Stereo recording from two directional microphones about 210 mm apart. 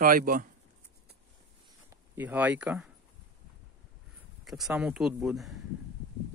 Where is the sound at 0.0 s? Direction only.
40° right (ahead or behind).